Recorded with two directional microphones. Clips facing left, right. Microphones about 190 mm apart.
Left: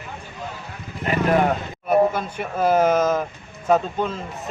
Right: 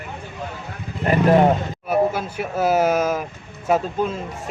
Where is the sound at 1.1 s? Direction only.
30° right (ahead or behind).